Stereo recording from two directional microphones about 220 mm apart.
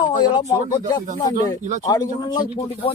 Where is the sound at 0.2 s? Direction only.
15° left (ahead or behind).